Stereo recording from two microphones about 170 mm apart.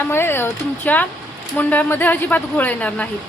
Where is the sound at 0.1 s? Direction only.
15° left (ahead or behind).